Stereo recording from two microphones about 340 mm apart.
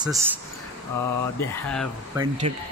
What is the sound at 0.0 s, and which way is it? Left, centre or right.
Speech, centre.